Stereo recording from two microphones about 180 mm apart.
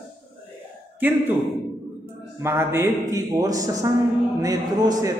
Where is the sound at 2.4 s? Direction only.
15° right (ahead or behind).